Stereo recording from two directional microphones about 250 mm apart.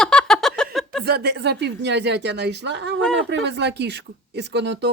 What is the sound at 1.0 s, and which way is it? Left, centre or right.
Speech, right.